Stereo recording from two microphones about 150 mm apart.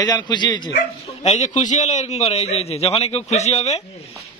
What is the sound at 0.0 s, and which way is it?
Speech, 25° left (ahead or behind).